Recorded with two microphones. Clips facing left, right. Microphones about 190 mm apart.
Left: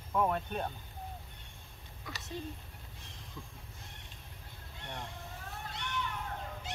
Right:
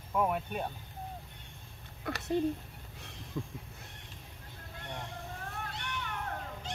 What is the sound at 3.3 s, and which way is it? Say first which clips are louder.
Train: right 11 dB; 70° right (ahead or behind).